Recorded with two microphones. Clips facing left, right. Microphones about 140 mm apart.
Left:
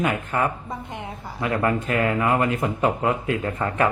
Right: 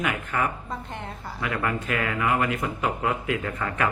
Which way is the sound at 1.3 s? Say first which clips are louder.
Left 5 dB; 35° left (ahead or behind).